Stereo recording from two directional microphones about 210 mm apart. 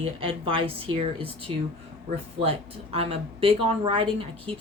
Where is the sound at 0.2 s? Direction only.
25° right (ahead or behind).